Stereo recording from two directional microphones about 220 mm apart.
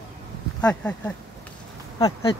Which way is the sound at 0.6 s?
5° left (ahead or behind).